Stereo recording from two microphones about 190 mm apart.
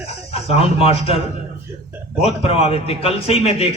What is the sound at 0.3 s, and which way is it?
Speech, 30° left (ahead or behind).